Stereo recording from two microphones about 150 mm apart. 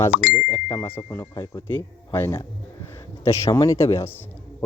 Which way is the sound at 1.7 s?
15° left (ahead or behind).